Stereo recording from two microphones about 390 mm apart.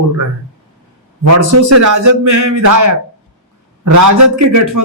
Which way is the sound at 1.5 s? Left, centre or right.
Right.